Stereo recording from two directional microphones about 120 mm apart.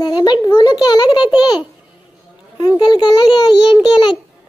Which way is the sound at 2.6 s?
35° left (ahead or behind).